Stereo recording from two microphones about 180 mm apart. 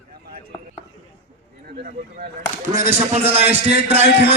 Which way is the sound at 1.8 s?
50° right (ahead or behind).